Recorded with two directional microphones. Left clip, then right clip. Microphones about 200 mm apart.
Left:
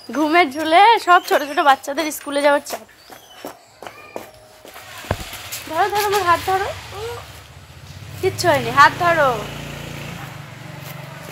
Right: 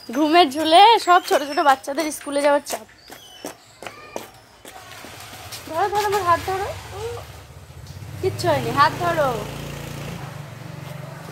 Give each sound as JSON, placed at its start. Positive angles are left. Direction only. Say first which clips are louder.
{"t": 0.1, "sound": "a woman's voice", "louder": "even", "side_deg": 0}
{"t": 5.8, "sound": "speech", "louder": "left 3 dB", "side_deg": 40}
{"t": 8.2, "sound": "speech", "louder": "left 4 dB", "side_deg": 35}